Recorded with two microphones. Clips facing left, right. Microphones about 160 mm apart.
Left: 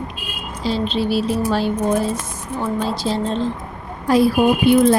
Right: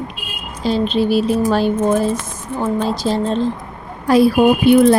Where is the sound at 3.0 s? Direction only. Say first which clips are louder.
Right 3 dB; 50° right (ahead or behind).